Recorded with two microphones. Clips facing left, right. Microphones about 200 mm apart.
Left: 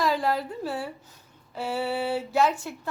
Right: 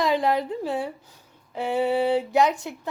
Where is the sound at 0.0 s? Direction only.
20° right (ahead or behind).